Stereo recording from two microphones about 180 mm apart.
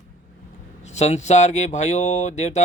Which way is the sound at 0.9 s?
40° left (ahead or behind).